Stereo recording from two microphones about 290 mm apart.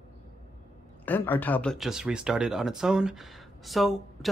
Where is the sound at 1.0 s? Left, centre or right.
Centre.